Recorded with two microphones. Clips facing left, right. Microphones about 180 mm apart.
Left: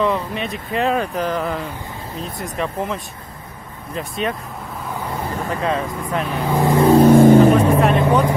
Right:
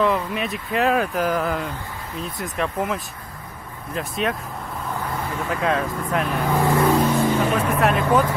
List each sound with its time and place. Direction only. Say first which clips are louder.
0.0 s speech: left 1 dB; 5° right (ahead or behind)
5.5 s speech: even; centre (ahead or behind); by 6.8 s 15° left (ahead or behind)
6.8 s vehicle: left 9 dB; 35° left (ahead or behind)
7.1 s vehicle: left 11 dB; 50° left (ahead or behind)
8.0 s speech: left 2 dB; 20° left (ahead or behind)